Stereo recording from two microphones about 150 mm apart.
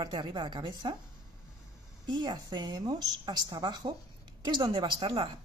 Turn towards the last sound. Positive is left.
turn(degrees=-35)  # may be behind; listen again after turning